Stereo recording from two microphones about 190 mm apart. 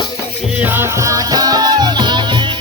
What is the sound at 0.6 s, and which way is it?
Music, 10° right (ahead or behind).